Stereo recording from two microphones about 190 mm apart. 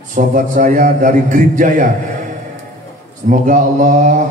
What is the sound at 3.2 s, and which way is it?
Speech, 40° right (ahead or behind).